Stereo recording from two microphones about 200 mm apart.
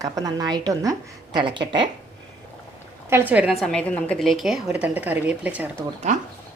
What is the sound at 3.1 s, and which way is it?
A woman's voice, 10° right (ahead or behind).